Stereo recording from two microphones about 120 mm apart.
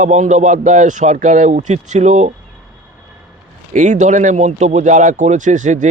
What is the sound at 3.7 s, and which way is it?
A man's voice, 90° right.